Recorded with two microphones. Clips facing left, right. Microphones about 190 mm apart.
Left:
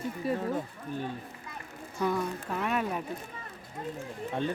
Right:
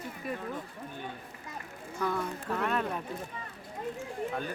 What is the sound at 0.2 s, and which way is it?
Speech, 30° left (ahead or behind).